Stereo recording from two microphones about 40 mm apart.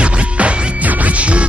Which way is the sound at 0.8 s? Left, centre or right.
Right.